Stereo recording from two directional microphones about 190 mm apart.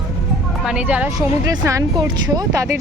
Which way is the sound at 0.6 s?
5° right (ahead or behind).